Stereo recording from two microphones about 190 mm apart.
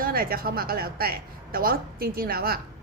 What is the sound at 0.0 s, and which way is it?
A woman's voice, 50° right (ahead or behind).